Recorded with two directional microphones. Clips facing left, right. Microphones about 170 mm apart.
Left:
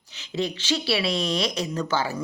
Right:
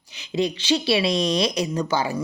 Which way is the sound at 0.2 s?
15° right (ahead or behind).